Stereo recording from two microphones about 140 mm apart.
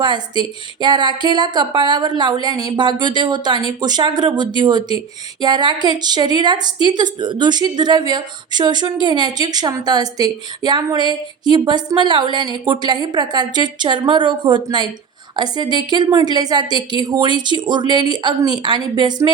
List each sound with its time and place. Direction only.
0.0 s a woman's voice: 35° right (ahead or behind)